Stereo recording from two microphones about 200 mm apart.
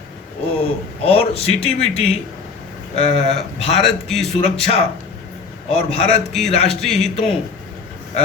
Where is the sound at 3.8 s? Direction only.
Centre (ahead or behind).